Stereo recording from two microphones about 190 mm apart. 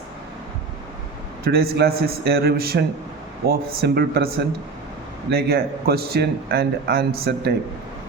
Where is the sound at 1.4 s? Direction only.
55° right (ahead or behind).